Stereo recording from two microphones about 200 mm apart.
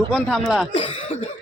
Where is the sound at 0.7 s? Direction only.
30° left (ahead or behind).